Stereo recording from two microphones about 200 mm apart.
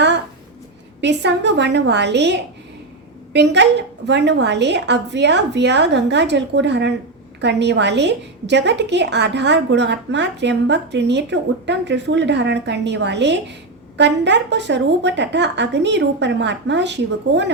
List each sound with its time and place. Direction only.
1.0 s a woman's voice: 60° right (ahead or behind)